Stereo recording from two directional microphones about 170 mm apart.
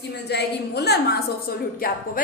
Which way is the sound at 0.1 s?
80° left.